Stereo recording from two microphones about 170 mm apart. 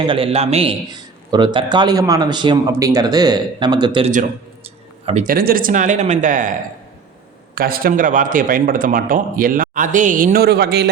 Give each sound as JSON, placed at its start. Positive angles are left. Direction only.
{"t": 0.0, "sound": "a man's voice", "side_deg": -30}
{"t": 5.2, "sound": "a man's voice", "side_deg": -60}